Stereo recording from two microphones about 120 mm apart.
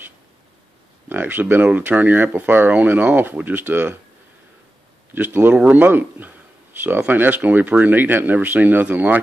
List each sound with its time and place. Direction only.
1.0 s speech: 15° right (ahead or behind)
5.1 s speech: 15° right (ahead or behind)